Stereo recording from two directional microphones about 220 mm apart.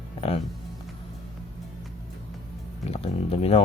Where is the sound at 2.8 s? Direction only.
25° left (ahead or behind).